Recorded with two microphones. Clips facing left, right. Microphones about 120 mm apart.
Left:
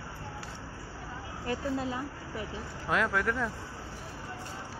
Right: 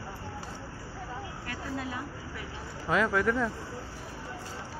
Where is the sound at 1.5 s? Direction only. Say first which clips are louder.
Left 6 dB; 25° left (ahead or behind).